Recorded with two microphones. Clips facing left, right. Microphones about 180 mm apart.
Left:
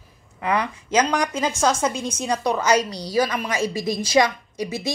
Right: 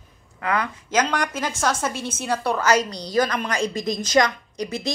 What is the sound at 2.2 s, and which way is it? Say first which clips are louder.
A woman's voice: even; 15° left (ahead or behind).